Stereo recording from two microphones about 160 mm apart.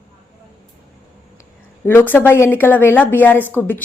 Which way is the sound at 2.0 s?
10° left (ahead or behind).